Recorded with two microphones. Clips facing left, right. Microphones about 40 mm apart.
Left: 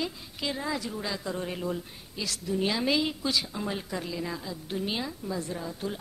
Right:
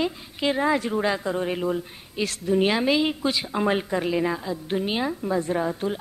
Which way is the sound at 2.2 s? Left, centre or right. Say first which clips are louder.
Right 8 dB; right.